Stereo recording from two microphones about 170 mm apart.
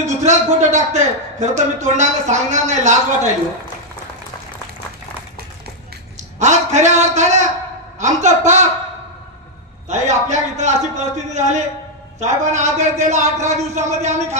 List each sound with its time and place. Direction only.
0.0 s a man's voice: 45° right (ahead or behind)
6.4 s a man's voice: 45° right (ahead or behind)
9.8 s a man's voice: 45° right (ahead or behind)